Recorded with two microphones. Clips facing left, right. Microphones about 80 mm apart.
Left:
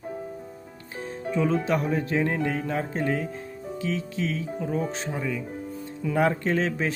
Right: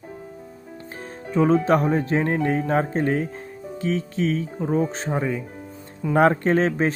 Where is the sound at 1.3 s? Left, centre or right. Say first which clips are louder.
Right 6 dB; right.